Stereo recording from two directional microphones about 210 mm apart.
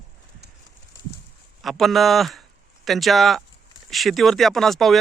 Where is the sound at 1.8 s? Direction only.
Centre (ahead or behind).